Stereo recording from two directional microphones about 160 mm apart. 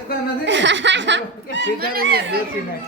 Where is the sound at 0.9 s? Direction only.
90° right; by 2.4 s 70° right (ahead or behind).